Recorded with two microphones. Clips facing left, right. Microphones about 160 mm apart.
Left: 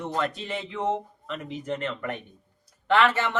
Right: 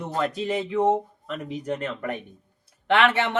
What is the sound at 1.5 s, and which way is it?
Speech, 10° right (ahead or behind).